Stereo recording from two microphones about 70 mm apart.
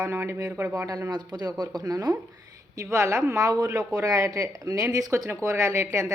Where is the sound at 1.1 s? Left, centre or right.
Right.